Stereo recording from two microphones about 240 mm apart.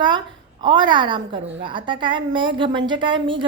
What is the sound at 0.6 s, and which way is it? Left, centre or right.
A woman's voice, centre.